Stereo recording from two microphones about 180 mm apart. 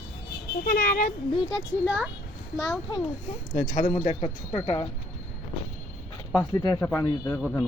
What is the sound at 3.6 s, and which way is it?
Speech, 45° left (ahead or behind).